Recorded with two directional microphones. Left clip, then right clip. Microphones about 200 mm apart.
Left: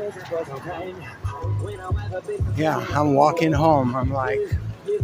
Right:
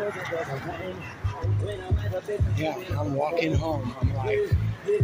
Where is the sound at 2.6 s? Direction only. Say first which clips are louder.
Left 13 dB; 40° left (ahead or behind).